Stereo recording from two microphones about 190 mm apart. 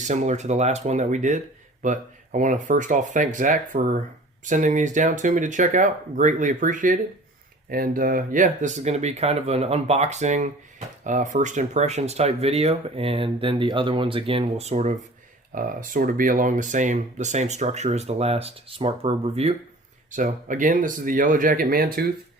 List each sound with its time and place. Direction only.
0.1 s speech: 40° right (ahead or behind)
15.5 s speech: 45° right (ahead or behind)
20.1 s speech: 45° right (ahead or behind)